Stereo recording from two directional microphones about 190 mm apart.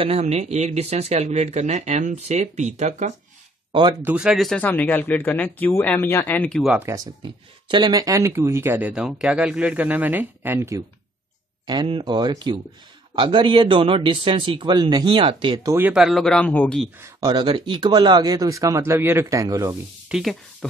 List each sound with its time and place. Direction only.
0.0 s speech: 30° right (ahead or behind)
4.0 s speech: 5° right (ahead or behind)
6.9 s speech: 25° right (ahead or behind)
11.6 s a man's voice: 25° right (ahead or behind)
15.8 s speech: 5° right (ahead or behind)
17.0 s speech: 20° right (ahead or behind)
20.1 s speech: centre (ahead or behind)